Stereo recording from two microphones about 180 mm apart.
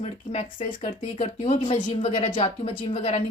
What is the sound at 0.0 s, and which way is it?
Speech, 35° left (ahead or behind).